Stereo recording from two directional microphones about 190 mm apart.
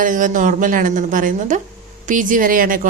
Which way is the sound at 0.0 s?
45° right (ahead or behind).